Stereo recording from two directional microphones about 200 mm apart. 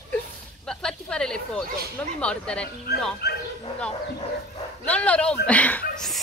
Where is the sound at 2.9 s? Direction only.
55° left (ahead or behind).